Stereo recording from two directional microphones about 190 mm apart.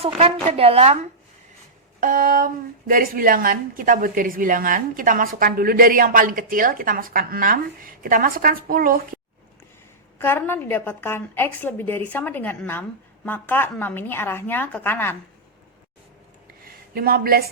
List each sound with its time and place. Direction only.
0.4 s a woman's voice: 30° right (ahead or behind)
2.0 s a woman's voice: 45° right (ahead or behind)
10.2 s a woman's voice: 10° left (ahead or behind)
16.9 s a woman's voice: 55° right (ahead or behind)